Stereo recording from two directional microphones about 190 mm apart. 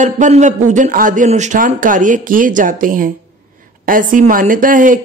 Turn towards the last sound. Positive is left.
turn(degrees=-45)  # may be behind; listen again after turning